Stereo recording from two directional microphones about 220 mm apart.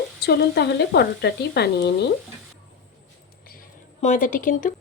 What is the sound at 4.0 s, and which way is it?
Speech, 35° left (ahead or behind).